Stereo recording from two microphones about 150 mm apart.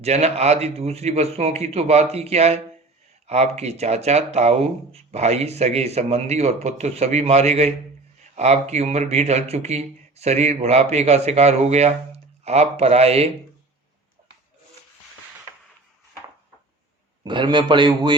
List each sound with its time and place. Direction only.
0.0 s speech: 45° right (ahead or behind)
17.2 s speech: 30° right (ahead or behind)